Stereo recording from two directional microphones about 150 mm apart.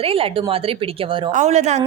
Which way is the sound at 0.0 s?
40° right (ahead or behind).